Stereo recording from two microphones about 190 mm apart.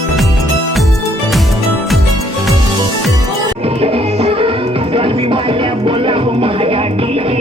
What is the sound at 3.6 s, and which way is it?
Music, 30° right (ahead or behind).